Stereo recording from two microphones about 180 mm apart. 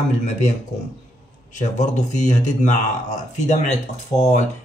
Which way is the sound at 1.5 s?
40° left (ahead or behind).